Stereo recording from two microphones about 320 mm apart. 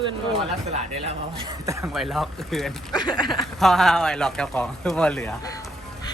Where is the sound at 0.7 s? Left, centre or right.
Centre.